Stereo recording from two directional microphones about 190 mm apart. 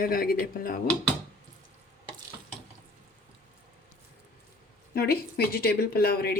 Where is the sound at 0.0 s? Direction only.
50° left (ahead or behind).